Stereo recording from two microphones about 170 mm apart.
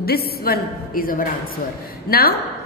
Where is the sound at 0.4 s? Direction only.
60° left (ahead or behind).